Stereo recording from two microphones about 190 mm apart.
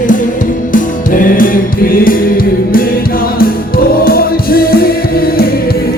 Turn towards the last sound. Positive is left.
turn(degrees=50)  # may be behind; listen again after turning